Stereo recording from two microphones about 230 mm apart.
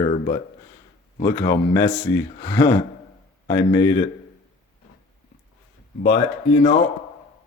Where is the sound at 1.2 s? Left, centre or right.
Centre.